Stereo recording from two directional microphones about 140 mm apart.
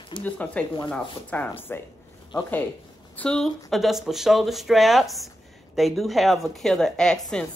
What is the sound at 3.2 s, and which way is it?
Speech, 5° left (ahead or behind).